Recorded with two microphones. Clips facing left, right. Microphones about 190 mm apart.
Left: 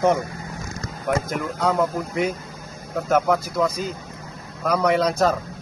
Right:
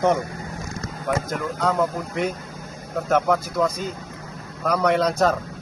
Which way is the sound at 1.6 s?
Centre (ahead or behind).